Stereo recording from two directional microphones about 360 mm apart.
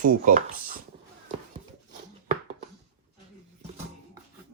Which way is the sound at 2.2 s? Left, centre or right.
Centre.